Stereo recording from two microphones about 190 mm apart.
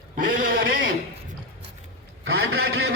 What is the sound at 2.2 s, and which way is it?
Speech, 60° right (ahead or behind).